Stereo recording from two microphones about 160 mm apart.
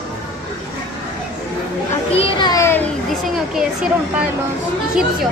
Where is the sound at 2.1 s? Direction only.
35° left (ahead or behind).